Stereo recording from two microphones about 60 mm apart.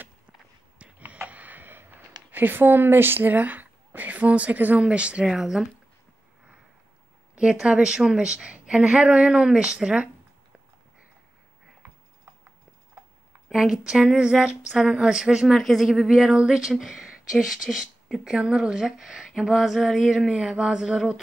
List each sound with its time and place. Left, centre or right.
0.7 s a sound: right
5.2 s speech: centre
7.3 s speech: centre
13.5 s speech: centre
15.4 s speech: centre